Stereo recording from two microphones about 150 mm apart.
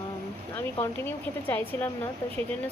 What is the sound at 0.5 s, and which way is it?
Speech, 15° left (ahead or behind).